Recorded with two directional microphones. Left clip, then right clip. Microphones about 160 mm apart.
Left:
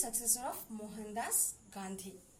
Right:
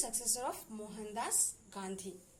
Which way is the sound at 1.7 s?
25° right (ahead or behind).